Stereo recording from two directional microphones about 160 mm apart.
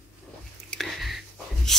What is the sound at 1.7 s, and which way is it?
Rub, centre (ahead or behind).